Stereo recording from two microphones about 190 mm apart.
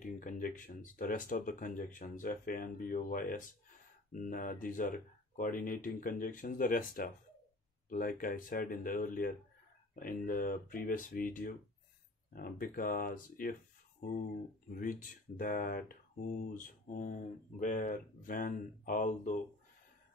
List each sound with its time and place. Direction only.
0.0 s speech: 45° left (ahead or behind)
14.7 s speech: 45° left (ahead or behind)